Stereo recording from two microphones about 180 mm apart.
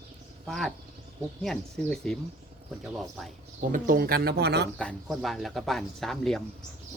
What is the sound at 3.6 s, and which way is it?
Speech, 50° right (ahead or behind).